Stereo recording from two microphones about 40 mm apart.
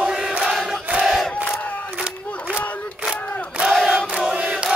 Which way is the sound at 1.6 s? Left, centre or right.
Left.